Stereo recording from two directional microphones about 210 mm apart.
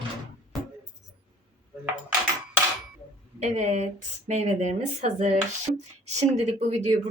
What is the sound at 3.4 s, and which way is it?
A woman's voice, 30° right (ahead or behind).